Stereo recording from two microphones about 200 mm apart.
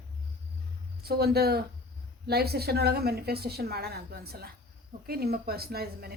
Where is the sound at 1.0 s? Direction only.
50° right (ahead or behind).